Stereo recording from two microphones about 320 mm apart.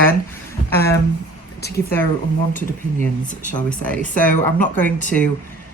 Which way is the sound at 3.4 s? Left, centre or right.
Left.